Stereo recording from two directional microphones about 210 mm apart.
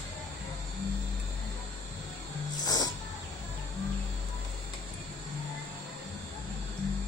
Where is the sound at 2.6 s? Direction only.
15° left (ahead or behind).